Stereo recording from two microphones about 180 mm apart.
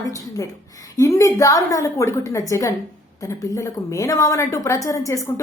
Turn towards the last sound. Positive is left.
turn(degrees=20)  # may be behind; listen again after turning